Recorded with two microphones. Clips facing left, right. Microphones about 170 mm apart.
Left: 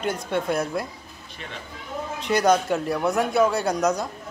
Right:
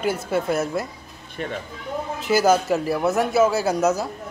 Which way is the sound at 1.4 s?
45° right (ahead or behind).